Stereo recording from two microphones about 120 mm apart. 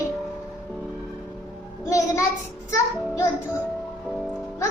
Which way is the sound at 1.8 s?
25° left (ahead or behind).